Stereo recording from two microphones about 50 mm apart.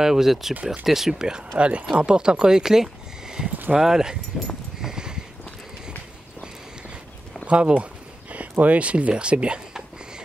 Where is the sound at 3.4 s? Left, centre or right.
Centre.